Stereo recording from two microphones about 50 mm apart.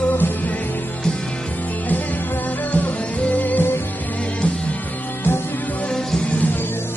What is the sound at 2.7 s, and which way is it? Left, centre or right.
Music, left.